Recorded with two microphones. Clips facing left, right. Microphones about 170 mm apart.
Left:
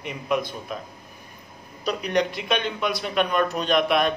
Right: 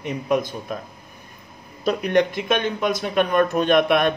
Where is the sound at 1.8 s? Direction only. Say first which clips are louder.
Right 5 dB; 50° right (ahead or behind).